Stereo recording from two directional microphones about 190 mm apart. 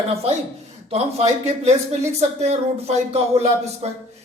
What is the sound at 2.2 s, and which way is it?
Speech, 35° right (ahead or behind).